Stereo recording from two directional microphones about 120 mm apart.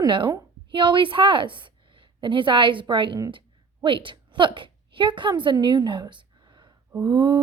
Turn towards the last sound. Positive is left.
turn(degrees=-35)  # may be behind; listen again after turning